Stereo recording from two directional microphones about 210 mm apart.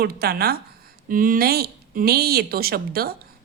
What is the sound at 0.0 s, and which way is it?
Speech, 45° right (ahead or behind).